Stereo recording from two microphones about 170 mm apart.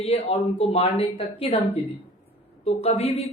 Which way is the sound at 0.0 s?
35° left (ahead or behind).